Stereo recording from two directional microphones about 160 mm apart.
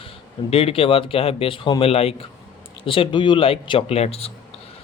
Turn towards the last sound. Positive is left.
turn(degrees=40)  # may be behind; listen again after turning